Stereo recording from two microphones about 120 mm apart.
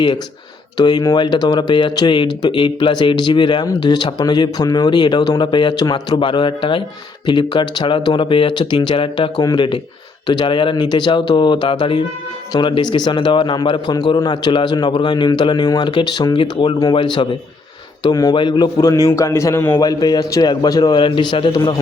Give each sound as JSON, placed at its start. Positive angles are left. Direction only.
{"t": 0.8, "sound": "speech", "side_deg": 35}
{"t": 9.4, "sound": "speech", "side_deg": 30}
{"t": 10.2, "sound": "speech", "side_deg": 40}
{"t": 18.0, "sound": "a man's voice", "side_deg": 35}
{"t": 19.8, "sound": "speech", "side_deg": 35}